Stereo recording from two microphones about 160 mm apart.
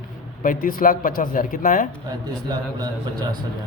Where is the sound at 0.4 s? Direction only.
60° left (ahead or behind).